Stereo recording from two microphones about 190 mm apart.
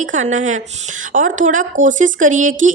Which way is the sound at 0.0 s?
40° right (ahead or behind).